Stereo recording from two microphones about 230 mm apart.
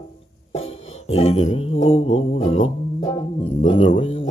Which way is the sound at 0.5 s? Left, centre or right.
Left.